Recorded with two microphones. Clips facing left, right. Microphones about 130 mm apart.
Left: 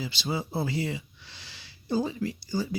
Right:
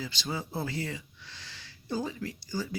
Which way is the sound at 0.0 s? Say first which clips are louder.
Left 4 dB; 15° left (ahead or behind).